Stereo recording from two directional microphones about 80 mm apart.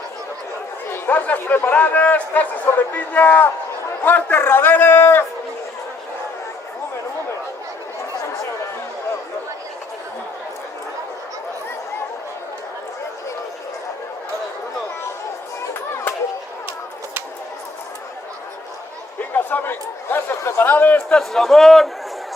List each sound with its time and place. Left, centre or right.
0.9 s speech: left
19.3 s chatter: left
21.1 s a sound: centre